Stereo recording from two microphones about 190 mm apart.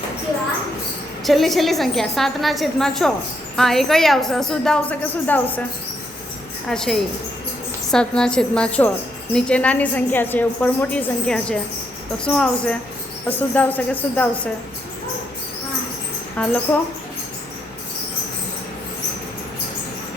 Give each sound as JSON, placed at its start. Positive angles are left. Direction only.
{"t": 1.2, "sound": "a woman's voice", "side_deg": 0}
{"t": 6.7, "sound": "a woman's voice", "side_deg": 5}
{"t": 16.4, "sound": "a woman's voice", "side_deg": 5}